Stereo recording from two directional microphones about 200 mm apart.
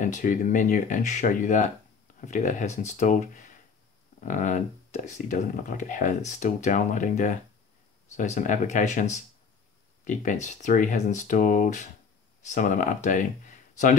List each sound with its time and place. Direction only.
0.0 s speech: 40° left (ahead or behind)